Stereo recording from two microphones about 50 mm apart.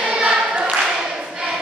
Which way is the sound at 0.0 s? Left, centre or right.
Centre.